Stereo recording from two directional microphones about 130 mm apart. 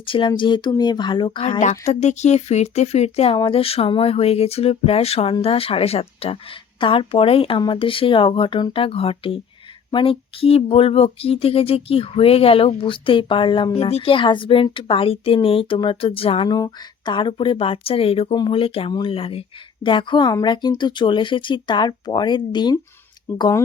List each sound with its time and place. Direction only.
0.0 s speech: 40° left (ahead or behind)
1.8 s speech: 60° left (ahead or behind)
3.3 s speech: 40° left (ahead or behind)
23.3 s speech: 15° left (ahead or behind)